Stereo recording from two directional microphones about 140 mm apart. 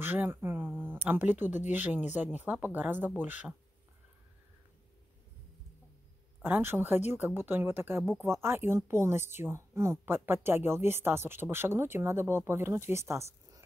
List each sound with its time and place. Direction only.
0.0 s a sound: 15° right (ahead or behind)
1.0 s speech: 15° right (ahead or behind)
6.4 s speech: 15° right (ahead or behind)